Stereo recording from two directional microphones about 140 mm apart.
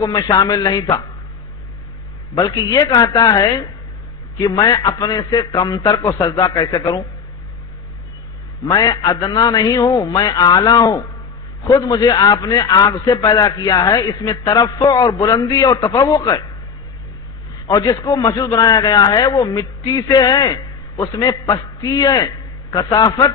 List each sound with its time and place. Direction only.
0.0 s a man's voice: 30° left (ahead or behind)
2.3 s a man's voice: 30° left (ahead or behind)
8.6 s a man's voice: 30° left (ahead or behind)
17.6 s a man's voice: 25° left (ahead or behind)